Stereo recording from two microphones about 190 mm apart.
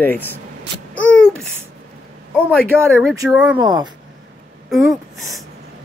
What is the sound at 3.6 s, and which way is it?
Speech, 20° right (ahead or behind).